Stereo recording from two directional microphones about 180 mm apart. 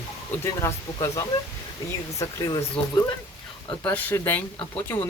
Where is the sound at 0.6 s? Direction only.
15° left (ahead or behind).